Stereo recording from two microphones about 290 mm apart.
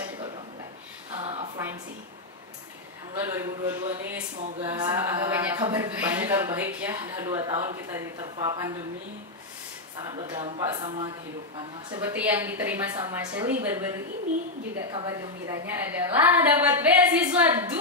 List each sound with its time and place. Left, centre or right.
1.1 s a sound: right
3.2 s speech: centre
10.0 s a woman's voice: centre